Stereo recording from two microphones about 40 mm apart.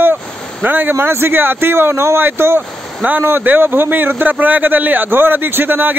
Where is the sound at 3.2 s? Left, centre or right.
Right.